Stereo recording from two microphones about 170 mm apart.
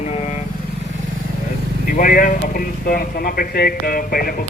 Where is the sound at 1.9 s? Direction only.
55° left (ahead or behind).